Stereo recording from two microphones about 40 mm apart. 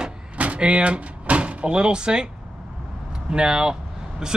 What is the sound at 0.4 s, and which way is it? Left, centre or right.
Speech, right.